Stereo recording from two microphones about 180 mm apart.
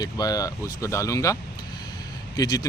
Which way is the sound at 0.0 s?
20° left (ahead or behind).